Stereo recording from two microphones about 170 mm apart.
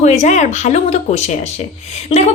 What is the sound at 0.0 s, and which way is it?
A woman's voice, 40° left (ahead or behind).